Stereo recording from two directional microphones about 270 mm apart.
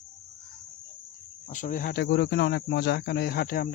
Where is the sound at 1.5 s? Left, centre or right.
Left.